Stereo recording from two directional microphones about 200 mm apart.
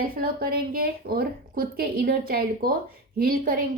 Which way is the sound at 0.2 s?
50° right (ahead or behind).